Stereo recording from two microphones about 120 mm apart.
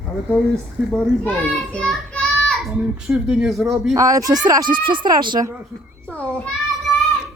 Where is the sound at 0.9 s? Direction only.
10° left (ahead or behind).